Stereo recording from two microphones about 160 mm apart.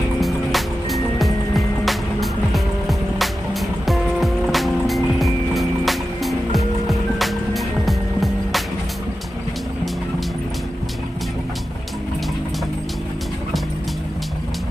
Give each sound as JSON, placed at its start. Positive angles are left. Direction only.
{"t": 0.2, "sound": "music", "side_deg": 0}